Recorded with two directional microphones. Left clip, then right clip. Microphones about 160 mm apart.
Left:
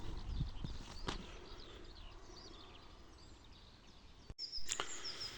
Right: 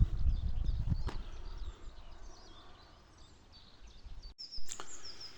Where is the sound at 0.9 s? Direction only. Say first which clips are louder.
Right 6 dB; 15° left (ahead or behind).